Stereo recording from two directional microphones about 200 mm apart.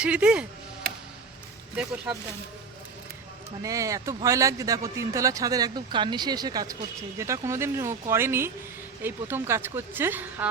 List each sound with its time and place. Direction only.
0.0 s speech: 5° right (ahead or behind)
1.7 s speech: 5° right (ahead or behind)
3.6 s speech: 15° right (ahead or behind)